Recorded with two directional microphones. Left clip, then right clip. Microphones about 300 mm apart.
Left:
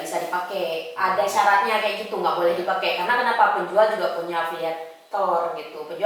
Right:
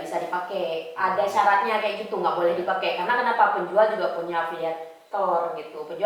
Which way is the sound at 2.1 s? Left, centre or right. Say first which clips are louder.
Even; centre.